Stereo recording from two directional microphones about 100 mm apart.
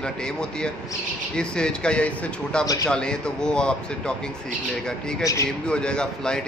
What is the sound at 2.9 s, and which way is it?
Speech, 10° left (ahead or behind).